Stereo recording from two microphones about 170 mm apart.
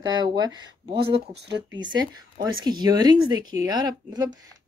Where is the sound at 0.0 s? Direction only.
25° right (ahead or behind).